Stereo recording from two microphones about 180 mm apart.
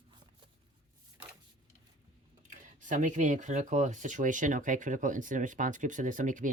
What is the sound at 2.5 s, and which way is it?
Speech, 45° right (ahead or behind).